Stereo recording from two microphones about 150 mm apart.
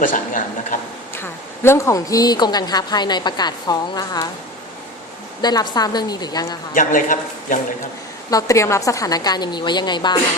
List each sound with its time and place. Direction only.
0.0 s a man's voice: 60° left (ahead or behind)
1.1 s speech: 15° left (ahead or behind)
5.4 s speech: 25° left (ahead or behind)
6.7 s a man's voice: 60° left (ahead or behind)
8.3 s speech: 20° left (ahead or behind)